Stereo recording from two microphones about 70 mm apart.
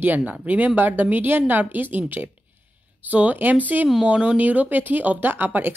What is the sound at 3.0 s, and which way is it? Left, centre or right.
A woman's voice, right.